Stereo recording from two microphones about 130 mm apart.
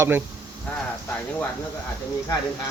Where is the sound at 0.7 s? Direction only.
10° left (ahead or behind).